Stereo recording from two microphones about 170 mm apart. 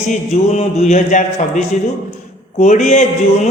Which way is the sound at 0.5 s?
40° left (ahead or behind).